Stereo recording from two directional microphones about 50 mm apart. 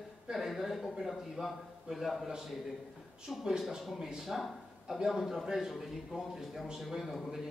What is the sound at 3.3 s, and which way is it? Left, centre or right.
A man's voice, centre.